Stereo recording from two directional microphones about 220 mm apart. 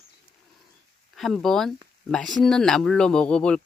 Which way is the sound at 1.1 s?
Centre (ahead or behind).